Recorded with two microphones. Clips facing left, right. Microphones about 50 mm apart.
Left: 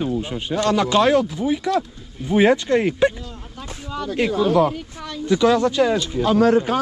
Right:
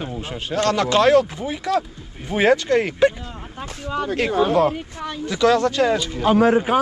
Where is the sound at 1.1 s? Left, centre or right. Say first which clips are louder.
Right 1 dB; right.